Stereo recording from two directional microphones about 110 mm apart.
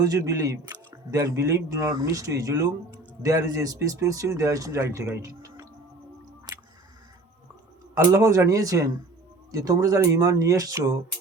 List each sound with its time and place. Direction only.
0.0 s speech: 30° right (ahead or behind)
6.5 s music: 40° right (ahead or behind)
7.9 s speech: 30° right (ahead or behind)